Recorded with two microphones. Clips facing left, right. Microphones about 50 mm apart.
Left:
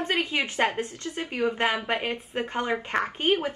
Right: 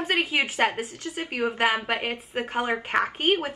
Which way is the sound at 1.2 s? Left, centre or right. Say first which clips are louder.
Even; right.